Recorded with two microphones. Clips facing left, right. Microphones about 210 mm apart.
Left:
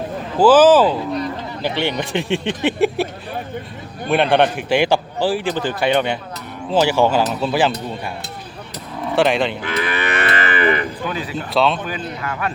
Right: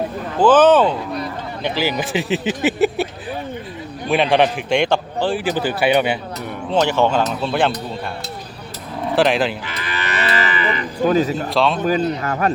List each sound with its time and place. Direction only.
0.3 s speech: 5° left (ahead or behind)
4.1 s speech: centre (ahead or behind)
5.4 s speech: 5° right (ahead or behind)
6.7 s speech: 5° left (ahead or behind)
9.1 s speech: centre (ahead or behind)
9.6 s livestock: 55° left (ahead or behind)
11.0 s a man's voice: 40° right (ahead or behind)
11.5 s speech: centre (ahead or behind)
11.8 s a man's voice: 40° right (ahead or behind)